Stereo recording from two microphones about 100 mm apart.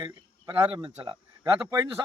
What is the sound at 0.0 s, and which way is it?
Speech, 55° right (ahead or behind).